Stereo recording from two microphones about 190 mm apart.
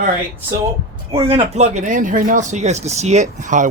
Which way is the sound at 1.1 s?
30° right (ahead or behind).